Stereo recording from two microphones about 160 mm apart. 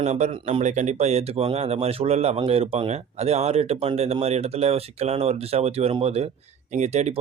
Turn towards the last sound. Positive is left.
turn(degrees=-45)  # may be behind; listen again after turning